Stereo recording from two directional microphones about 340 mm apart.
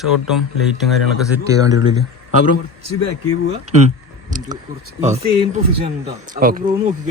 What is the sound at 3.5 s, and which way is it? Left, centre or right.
Speech, centre.